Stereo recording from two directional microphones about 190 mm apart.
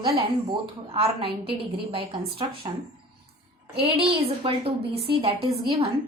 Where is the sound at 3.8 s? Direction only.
30° right (ahead or behind).